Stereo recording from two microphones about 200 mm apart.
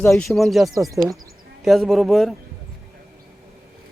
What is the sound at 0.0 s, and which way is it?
Speech, 5° left (ahead or behind).